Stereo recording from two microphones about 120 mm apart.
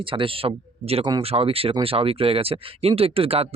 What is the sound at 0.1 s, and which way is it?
Speech, 50° right (ahead or behind).